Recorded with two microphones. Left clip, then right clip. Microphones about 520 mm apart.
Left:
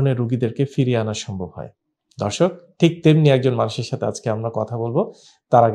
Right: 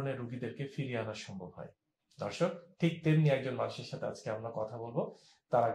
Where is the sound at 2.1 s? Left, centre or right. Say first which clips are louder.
Left 14 dB; left.